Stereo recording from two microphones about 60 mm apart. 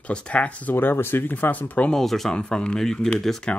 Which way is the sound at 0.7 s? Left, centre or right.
Left.